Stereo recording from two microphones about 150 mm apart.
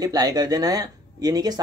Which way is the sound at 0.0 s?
25° right (ahead or behind).